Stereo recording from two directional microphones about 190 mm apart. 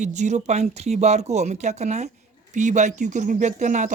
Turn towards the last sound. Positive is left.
turn(degrees=-40)  # may be behind; listen again after turning